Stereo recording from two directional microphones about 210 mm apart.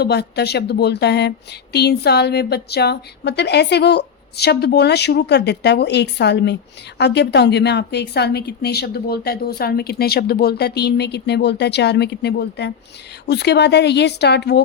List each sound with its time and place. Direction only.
0.0 s a woman's voice: 50° left (ahead or behind)